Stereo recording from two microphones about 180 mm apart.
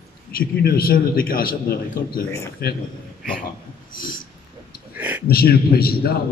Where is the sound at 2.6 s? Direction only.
60° left (ahead or behind).